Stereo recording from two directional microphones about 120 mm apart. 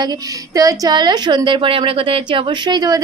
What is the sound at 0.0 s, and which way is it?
Speech, 30° right (ahead or behind).